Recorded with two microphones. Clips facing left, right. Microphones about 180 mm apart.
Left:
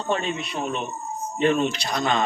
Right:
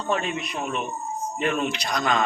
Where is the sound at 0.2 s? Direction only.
30° left (ahead or behind).